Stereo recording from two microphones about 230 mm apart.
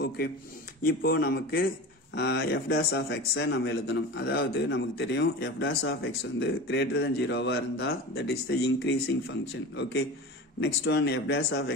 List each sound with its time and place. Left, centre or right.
0.8 s speech: left